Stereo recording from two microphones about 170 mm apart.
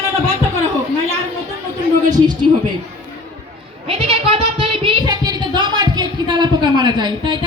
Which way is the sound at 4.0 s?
35° right (ahead or behind).